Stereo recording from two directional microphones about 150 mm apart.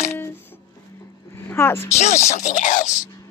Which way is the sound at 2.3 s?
55° left (ahead or behind).